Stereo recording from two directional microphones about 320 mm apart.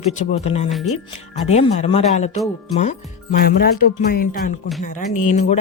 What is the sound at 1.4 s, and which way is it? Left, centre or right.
Speech, centre.